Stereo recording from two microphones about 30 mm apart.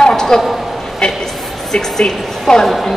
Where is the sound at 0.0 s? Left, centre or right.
Centre.